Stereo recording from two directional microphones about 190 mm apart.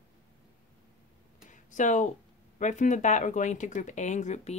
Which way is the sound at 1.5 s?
40° left (ahead or behind).